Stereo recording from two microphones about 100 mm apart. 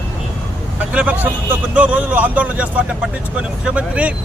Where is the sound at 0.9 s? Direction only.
15° right (ahead or behind).